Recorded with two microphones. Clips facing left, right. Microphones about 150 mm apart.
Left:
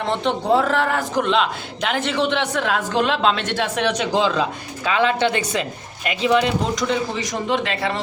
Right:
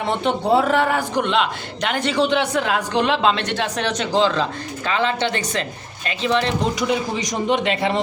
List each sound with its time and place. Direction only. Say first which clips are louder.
0.0 s a man's voice: right 1 dB; 5° right (ahead or behind)
6.7 s a man's voice: right 1 dB; 15° right (ahead or behind)